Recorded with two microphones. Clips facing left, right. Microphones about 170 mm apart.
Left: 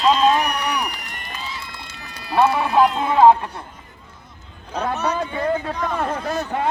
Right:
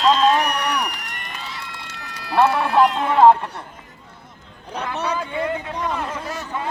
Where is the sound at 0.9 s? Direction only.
70° right (ahead or behind).